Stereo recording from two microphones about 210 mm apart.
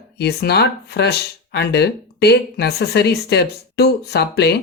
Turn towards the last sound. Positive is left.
turn(degrees=50)  # may be behind; listen again after turning